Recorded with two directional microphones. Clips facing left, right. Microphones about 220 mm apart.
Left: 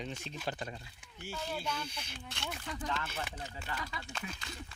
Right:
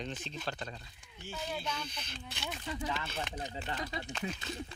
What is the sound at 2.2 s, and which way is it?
Speech, centre (ahead or behind).